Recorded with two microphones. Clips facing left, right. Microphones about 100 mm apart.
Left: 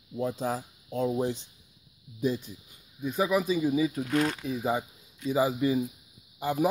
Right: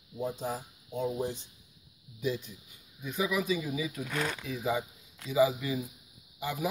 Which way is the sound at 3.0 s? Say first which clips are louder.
Left 4 dB; 35° left (ahead or behind).